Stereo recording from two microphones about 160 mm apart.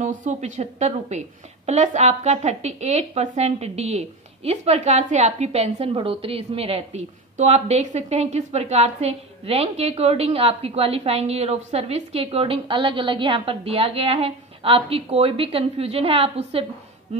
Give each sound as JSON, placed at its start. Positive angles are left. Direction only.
{"t": 0.0, "sound": "a woman's voice", "side_deg": -50}